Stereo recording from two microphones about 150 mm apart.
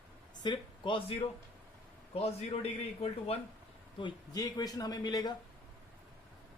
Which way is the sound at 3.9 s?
30° left (ahead or behind).